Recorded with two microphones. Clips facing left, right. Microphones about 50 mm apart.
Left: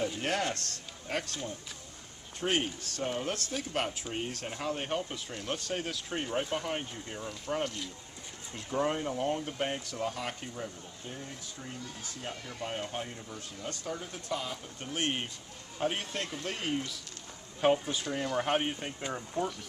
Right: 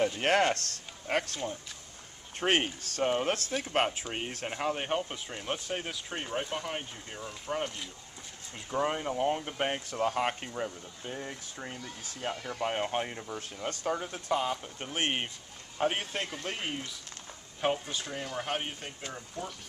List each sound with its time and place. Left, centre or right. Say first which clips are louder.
0.2 s speech: right 6 dB; right
2.4 s speech: right 3 dB; right
10.1 s speech: right 7 dB; right; by 16.9 s centre
17.6 s speech: left 4 dB; centre